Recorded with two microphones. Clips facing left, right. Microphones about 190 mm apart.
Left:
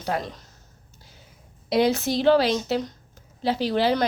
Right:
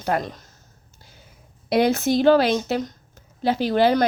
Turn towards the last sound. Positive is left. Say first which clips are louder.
# right 4 dB
turn(degrees=-50)  # may be behind; listen again after turning